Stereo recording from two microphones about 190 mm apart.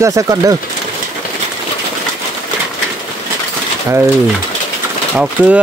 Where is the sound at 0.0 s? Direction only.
15° right (ahead or behind).